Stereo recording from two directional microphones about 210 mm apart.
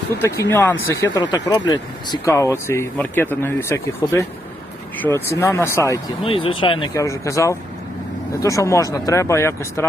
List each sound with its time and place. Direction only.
0.2 s speech: 15° left (ahead or behind)
6.2 s speech: 25° left (ahead or behind)